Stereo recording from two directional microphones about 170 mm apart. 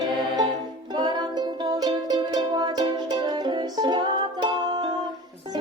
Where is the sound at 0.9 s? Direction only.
25° right (ahead or behind).